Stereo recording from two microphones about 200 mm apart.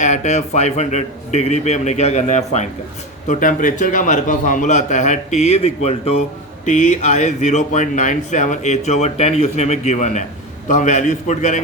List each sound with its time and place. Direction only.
0.0 s speech: 35° left (ahead or behind)